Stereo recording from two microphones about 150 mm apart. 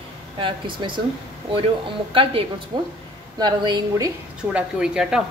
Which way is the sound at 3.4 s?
30° right (ahead or behind).